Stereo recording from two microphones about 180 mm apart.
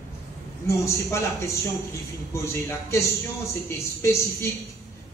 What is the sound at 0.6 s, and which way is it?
A man's voice, 15° left (ahead or behind).